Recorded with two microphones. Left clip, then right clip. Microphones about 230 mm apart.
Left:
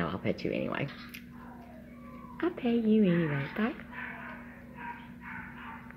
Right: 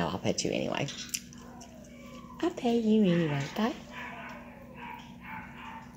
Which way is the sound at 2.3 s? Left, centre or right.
Centre.